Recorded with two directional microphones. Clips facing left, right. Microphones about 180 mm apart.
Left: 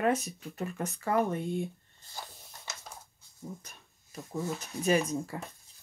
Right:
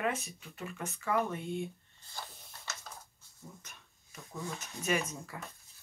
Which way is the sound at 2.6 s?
15° left (ahead or behind).